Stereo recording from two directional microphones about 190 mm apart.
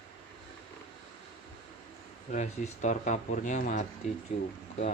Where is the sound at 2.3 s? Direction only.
35° left (ahead or behind).